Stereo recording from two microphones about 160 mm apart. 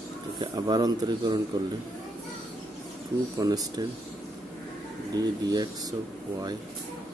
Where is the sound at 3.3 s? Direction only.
25° right (ahead or behind).